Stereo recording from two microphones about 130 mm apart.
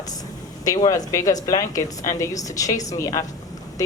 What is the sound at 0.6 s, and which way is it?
Speech, 25° left (ahead or behind).